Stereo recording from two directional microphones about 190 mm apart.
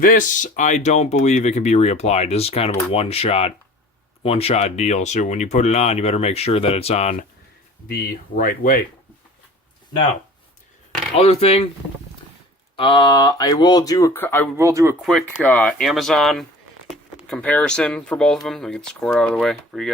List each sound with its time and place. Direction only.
0.0 s speech: 45° left (ahead or behind)
7.9 s speech: 50° left (ahead or behind)
11.2 s speech: 35° left (ahead or behind)
12.7 s speech: 25° left (ahead or behind); by 14.5 s 10° left (ahead or behind)
14.5 s speech: 15° right (ahead or behind)
15.0 s speech: centre (ahead or behind)